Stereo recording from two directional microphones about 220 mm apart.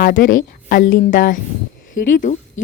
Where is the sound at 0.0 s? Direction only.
40° left (ahead or behind).